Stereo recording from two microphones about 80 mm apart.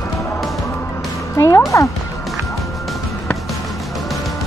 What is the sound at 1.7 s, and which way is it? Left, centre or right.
Speech, left.